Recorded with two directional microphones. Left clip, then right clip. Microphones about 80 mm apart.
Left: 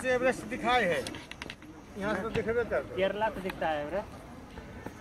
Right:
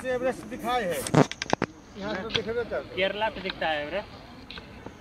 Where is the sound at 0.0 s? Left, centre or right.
Left.